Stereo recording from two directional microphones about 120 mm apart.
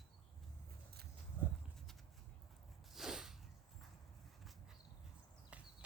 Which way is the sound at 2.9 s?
5° right (ahead or behind).